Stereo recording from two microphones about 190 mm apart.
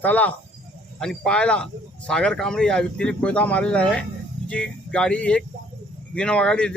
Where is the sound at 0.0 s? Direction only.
10° left (ahead or behind).